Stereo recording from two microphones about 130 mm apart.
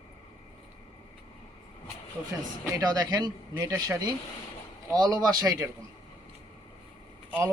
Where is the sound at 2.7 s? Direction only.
30° right (ahead or behind).